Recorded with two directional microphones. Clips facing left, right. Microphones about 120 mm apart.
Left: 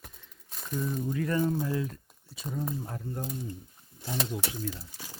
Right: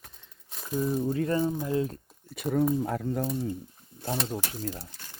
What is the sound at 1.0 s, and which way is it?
Speech, 30° right (ahead or behind).